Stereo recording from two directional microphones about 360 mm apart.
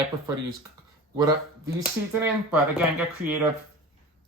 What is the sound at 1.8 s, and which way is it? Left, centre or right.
Speech, centre.